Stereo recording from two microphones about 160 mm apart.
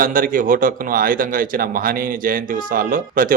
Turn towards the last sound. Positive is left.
turn(degrees=-60)  # may be behind; listen again after turning